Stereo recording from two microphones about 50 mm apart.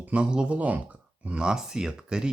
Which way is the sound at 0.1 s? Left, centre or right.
Centre.